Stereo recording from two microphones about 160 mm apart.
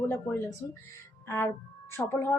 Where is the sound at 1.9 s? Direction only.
15° left (ahead or behind).